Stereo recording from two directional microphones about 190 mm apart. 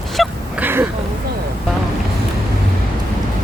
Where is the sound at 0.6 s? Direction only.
10° right (ahead or behind).